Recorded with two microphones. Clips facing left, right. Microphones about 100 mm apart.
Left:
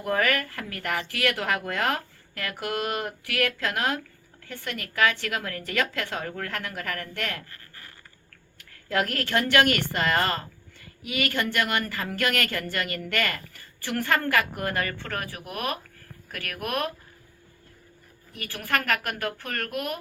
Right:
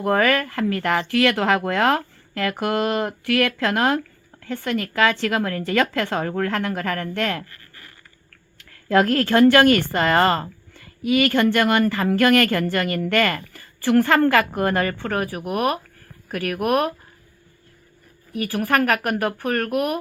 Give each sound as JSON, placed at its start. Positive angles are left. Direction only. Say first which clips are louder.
{"t": 0.0, "sound": "a woman's voice", "louder": "right 6 dB", "side_deg": -60}
{"t": 8.9, "sound": "a woman's voice", "louder": "right 9 dB", "side_deg": -50}
{"t": 18.5, "sound": "speech", "louder": "right 7 dB", "side_deg": -50}